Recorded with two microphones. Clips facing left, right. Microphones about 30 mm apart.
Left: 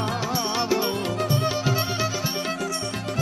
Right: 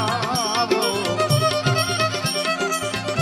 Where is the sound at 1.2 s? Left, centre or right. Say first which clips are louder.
Right 4 dB; right.